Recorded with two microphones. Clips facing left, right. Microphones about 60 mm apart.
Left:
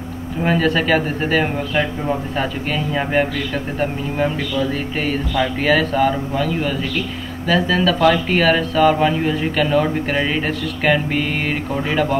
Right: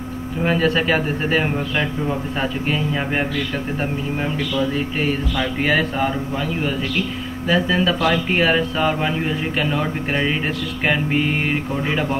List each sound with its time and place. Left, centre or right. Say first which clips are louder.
0.4 s speech: left 1 dB; centre
5.6 s speech: left 3 dB; right
6.3 s speech: left 2 dB; centre